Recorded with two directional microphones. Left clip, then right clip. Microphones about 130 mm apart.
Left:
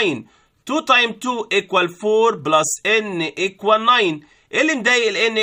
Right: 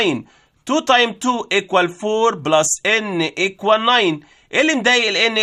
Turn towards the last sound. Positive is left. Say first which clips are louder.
# right 1 dB
turn(degrees=-40)  # may be behind; listen again after turning